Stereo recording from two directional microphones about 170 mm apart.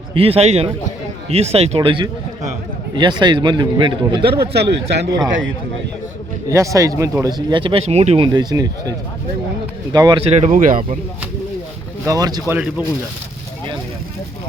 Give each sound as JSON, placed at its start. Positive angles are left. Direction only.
{"t": 0.1, "sound": "speech", "side_deg": -35}
{"t": 4.3, "sound": "speech", "side_deg": -70}
{"t": 6.5, "sound": "speech", "side_deg": -20}
{"t": 8.3, "sound": "speech", "side_deg": -25}
{"t": 9.9, "sound": "speech", "side_deg": -25}
{"t": 10.2, "sound": "speech", "side_deg": -40}
{"t": 12.0, "sound": "speech", "side_deg": -20}